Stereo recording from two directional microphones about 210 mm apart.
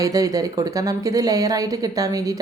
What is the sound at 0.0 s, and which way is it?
A woman's voice, 15° right (ahead or behind).